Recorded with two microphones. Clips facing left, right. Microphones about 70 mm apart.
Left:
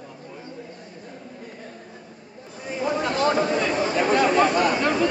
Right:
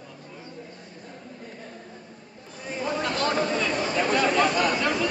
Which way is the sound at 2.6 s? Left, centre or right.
Centre.